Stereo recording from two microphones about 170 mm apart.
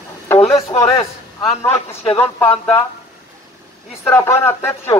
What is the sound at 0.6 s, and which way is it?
Speech, 15° left (ahead or behind).